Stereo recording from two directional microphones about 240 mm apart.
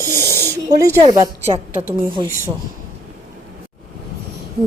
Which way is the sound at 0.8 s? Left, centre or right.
Centre.